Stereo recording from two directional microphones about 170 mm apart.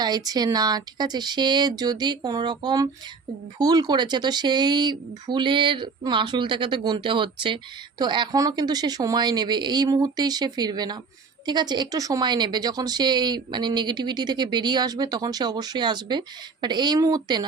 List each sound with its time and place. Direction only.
0.0 s speech: 25° right (ahead or behind)